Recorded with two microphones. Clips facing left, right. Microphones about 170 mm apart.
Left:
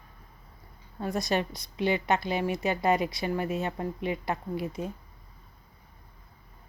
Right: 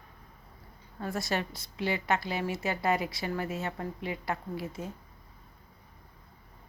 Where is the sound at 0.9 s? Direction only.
20° left (ahead or behind).